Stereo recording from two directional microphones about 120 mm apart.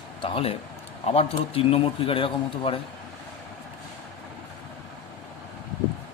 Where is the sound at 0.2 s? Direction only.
50° left (ahead or behind).